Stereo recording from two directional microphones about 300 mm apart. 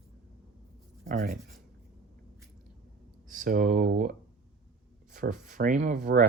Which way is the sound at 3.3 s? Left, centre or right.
Right.